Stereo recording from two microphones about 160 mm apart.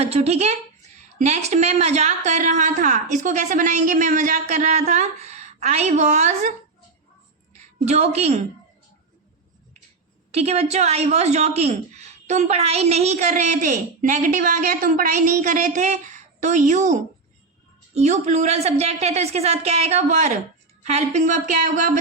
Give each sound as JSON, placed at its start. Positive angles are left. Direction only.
{"t": 0.0, "sound": "a woman's voice", "side_deg": -40}
{"t": 7.9, "sound": "a woman's voice", "side_deg": -40}
{"t": 10.3, "sound": "a woman's voice", "side_deg": -40}